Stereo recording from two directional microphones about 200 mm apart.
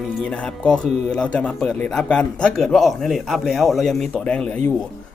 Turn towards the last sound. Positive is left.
turn(degrees=5)  # may be behind; listen again after turning